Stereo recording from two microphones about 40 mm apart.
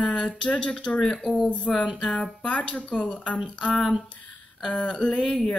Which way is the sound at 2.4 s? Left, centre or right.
Left.